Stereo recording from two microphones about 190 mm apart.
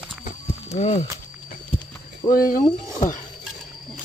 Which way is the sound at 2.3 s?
50° left (ahead or behind).